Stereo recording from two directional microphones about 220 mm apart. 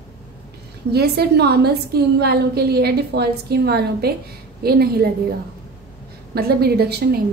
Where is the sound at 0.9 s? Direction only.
45° right (ahead or behind).